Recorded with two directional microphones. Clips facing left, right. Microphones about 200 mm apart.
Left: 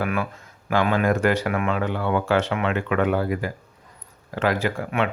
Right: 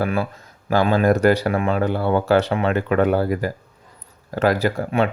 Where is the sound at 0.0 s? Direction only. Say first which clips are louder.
Right 3 dB; 35° right (ahead or behind).